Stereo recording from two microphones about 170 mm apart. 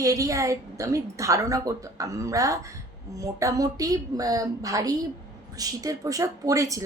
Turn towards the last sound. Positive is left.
turn(degrees=-20)  # may be behind; listen again after turning